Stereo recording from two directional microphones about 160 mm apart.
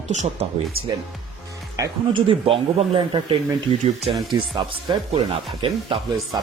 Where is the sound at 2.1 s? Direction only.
35° right (ahead or behind).